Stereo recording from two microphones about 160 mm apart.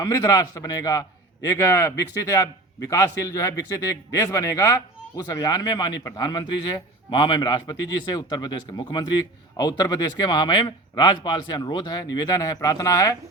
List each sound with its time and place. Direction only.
0.0 s a man's voice: 20° left (ahead or behind)